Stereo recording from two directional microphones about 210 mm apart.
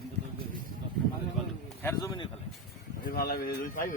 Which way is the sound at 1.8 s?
15° left (ahead or behind).